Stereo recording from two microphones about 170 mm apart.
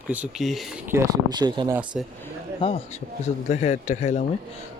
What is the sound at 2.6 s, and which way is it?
A man's voice, 40° left (ahead or behind).